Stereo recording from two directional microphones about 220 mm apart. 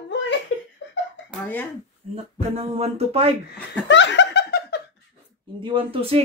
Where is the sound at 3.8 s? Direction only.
55° left (ahead or behind).